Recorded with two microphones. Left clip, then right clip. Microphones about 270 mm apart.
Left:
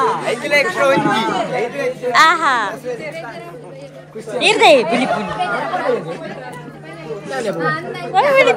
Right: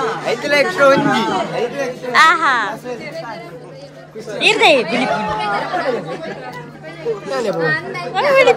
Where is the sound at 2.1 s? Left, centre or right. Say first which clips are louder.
Right 1 dB; centre.